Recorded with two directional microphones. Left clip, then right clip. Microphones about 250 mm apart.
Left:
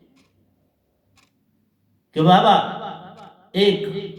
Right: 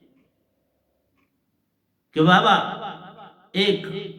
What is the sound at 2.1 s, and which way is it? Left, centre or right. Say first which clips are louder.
A man's voice: left 2 dB; right.